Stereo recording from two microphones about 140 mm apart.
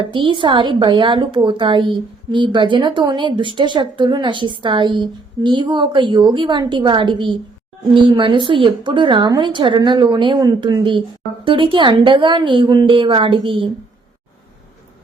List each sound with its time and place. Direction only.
0.0 s speech: 35° right (ahead or behind)